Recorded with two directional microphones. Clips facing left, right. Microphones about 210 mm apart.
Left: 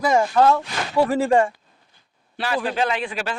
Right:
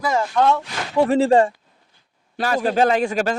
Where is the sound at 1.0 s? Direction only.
30° right (ahead or behind).